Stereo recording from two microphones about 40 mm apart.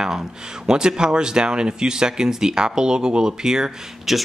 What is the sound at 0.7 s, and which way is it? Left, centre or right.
Speech, centre.